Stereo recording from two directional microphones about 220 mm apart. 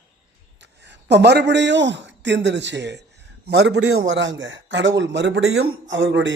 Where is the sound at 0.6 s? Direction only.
50° right (ahead or behind).